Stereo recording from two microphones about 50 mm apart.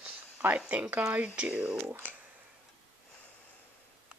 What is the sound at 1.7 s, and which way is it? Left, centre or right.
Speech, right.